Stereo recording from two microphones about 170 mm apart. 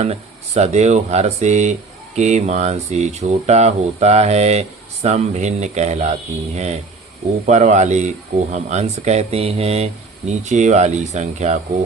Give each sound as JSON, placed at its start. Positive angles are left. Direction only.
{"t": 0.0, "sound": "speech", "side_deg": -40}